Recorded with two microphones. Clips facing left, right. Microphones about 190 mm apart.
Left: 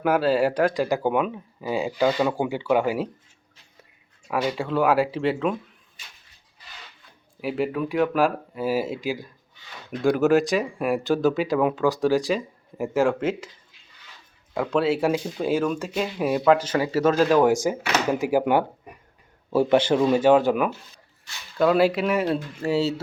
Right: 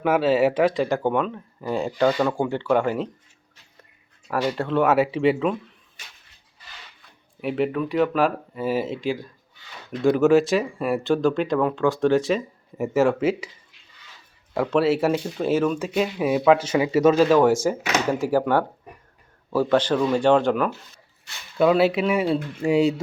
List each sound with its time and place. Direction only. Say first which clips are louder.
0.0 s speech: right 2 dB; centre (ahead or behind)
4.3 s speech: right 1 dB; centre (ahead or behind)
7.4 s speech: right 2 dB; centre (ahead or behind)
14.5 s speech: right 2 dB; 5° right (ahead or behind)
18.1 s speech: even; 15° left (ahead or behind)
19.6 s speech: even; 10° left (ahead or behind)
19.9 s speech: left 2 dB; 20° left (ahead or behind)
20.1 s speech: right 1 dB; 5° left (ahead or behind)
21.6 s speech: right 1 dB; 5° right (ahead or behind)